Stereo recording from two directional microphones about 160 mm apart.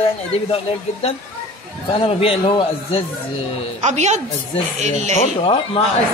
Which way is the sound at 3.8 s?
45° right (ahead or behind).